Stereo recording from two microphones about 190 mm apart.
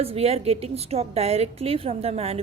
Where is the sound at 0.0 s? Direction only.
30° right (ahead or behind).